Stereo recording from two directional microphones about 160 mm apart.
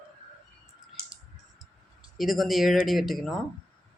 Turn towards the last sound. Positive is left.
turn(degrees=0)  # may be behind; listen again after turning